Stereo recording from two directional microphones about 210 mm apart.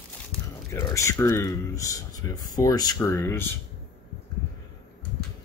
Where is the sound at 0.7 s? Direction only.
15° left (ahead or behind).